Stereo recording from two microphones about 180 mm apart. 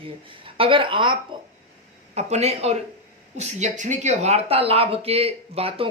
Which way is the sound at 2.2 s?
35° right (ahead or behind).